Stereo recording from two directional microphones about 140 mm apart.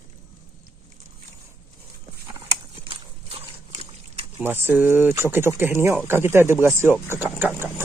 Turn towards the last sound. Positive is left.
turn(degrees=-15)  # may be behind; listen again after turning